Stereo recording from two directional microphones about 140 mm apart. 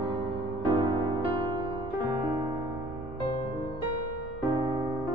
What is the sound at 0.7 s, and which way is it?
Music, 35° right (ahead or behind).